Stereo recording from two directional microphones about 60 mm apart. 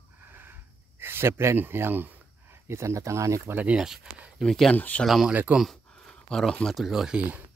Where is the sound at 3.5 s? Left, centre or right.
Right.